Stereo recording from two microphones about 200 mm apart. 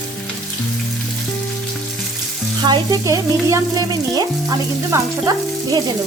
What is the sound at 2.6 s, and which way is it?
Frying, 20° right (ahead or behind).